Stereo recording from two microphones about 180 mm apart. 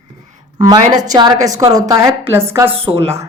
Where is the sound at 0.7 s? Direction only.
20° right (ahead or behind).